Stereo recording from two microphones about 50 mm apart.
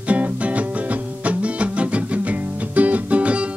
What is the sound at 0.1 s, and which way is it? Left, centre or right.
Music, right.